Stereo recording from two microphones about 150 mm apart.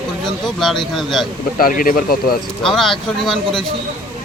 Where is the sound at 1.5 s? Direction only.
70° left (ahead or behind).